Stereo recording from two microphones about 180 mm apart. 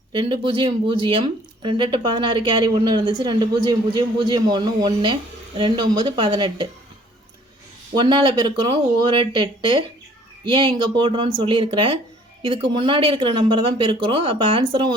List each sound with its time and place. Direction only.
0.1 s speech: 25° right (ahead or behind)
7.9 s speech: 25° right (ahead or behind)